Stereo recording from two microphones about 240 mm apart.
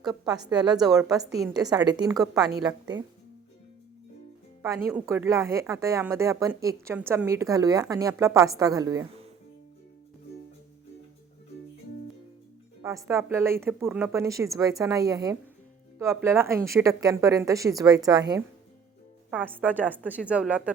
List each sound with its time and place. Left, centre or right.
0.0 s speech: centre
4.6 s speech: centre
13.1 s speech: centre
19.3 s speech: centre
19.5 s speech: centre